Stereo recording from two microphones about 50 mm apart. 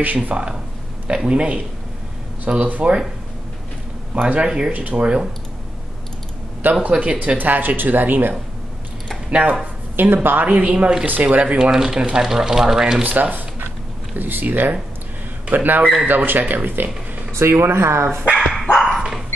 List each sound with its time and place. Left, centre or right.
0.0 s speech: right
1.2 s speech: centre
2.6 s speech: right
4.3 s speech: centre
6.6 s speech: right
9.3 s speech: right
9.9 s speech: right
10.6 s speech: right
11.1 s speech: right
11.7 s speech: centre
13.0 s speech: right
17.4 s speech: right
18.3 s dog: centre